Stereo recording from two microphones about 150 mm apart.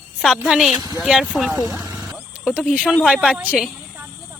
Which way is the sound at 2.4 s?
5° right (ahead or behind).